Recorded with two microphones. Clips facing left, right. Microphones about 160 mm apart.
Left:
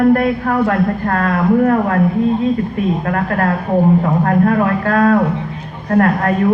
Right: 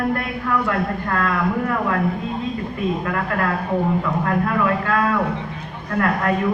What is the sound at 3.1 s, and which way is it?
A woman's voice, 45° left (ahead or behind).